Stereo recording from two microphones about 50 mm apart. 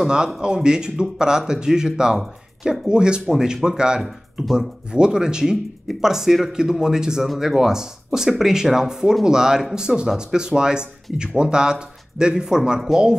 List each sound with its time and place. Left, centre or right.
0.0 s speech: centre